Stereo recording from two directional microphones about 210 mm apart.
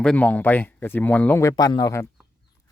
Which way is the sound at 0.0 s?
5° left (ahead or behind).